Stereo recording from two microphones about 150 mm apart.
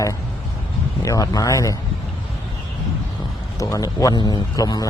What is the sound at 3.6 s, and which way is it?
A man's voice, 20° left (ahead or behind).